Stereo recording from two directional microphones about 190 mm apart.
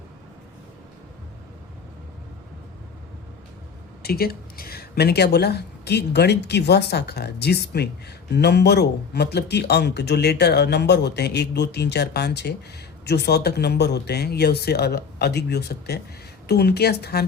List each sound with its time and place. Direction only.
4.0 s speech: 55° left (ahead or behind)